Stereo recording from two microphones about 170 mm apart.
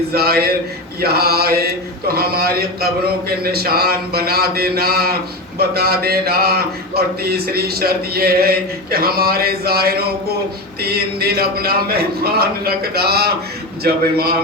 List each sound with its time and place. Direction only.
0.1 s mantra: 65° right (ahead or behind)